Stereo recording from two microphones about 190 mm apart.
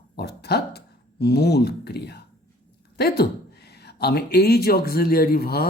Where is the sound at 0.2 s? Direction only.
60° left (ahead or behind).